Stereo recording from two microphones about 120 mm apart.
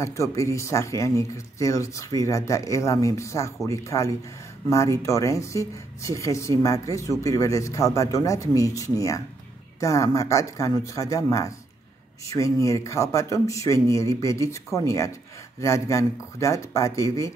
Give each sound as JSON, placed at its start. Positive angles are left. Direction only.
{"t": 0.0, "sound": "speech", "side_deg": 25}